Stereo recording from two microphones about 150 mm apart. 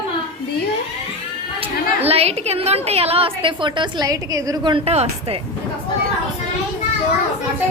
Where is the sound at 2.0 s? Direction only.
40° right (ahead or behind); by 4.8 s 25° right (ahead or behind).